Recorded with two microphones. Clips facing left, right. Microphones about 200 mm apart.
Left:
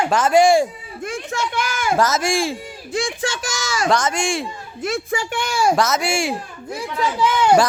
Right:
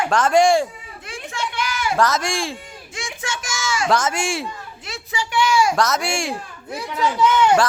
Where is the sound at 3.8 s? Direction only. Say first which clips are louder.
Left 2 dB; 5° right (ahead or behind).